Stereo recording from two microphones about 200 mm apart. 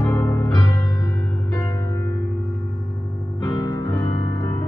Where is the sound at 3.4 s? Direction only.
20° left (ahead or behind).